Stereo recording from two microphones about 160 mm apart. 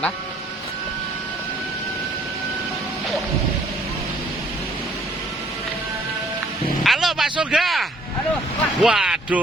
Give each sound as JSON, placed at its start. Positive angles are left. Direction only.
{"t": 6.8, "sound": "a man's voice", "side_deg": 0}